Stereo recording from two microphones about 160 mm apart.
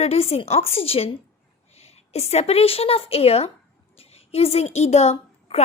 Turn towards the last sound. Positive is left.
turn(degrees=40)  # may be behind; listen again after turning